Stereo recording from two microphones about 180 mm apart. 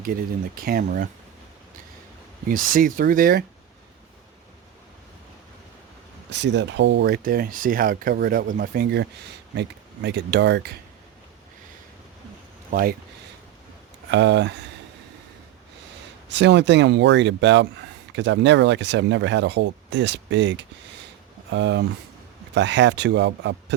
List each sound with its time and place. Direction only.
0.0 s speech: 55° right (ahead or behind)
2.5 s speech: 50° right (ahead or behind)
6.3 s speech: 75° right (ahead or behind)
14.1 s speech: 75° right (ahead or behind)
16.3 s speech: 75° right (ahead or behind)